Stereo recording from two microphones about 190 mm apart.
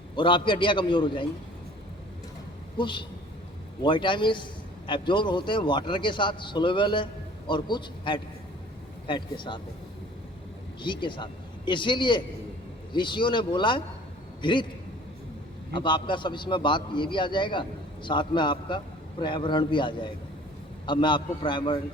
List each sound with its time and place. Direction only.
0.2 s a man's voice: 25° left (ahead or behind)
2.7 s a man's voice: 25° left (ahead or behind)
10.8 s a man's voice: 25° left (ahead or behind)
15.7 s a man's voice: 25° left (ahead or behind)